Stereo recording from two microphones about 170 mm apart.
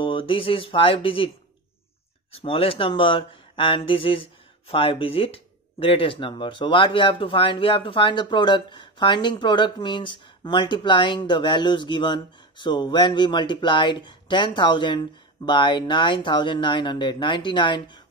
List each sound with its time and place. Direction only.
0.0 s speech: 30° left (ahead or behind)
2.4 s speech: 30° left (ahead or behind)